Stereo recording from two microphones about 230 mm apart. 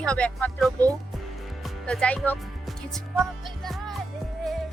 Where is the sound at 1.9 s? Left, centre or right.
Centre.